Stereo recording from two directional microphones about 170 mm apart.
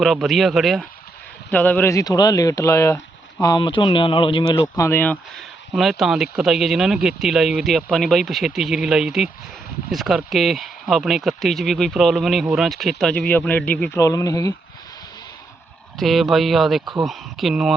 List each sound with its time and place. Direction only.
0.0 s speech: centre (ahead or behind); by 3.0 s 15° left (ahead or behind)
3.4 s speech: 25° left (ahead or behind)
4.8 s speech: 15° left (ahead or behind)
5.7 s speech: centre (ahead or behind)
14.0 s speech: 20° left (ahead or behind)
16.0 s speech: centre (ahead or behind)